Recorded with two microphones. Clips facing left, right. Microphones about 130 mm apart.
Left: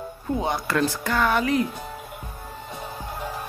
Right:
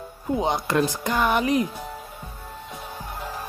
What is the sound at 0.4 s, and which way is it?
Speech, 20° right (ahead or behind).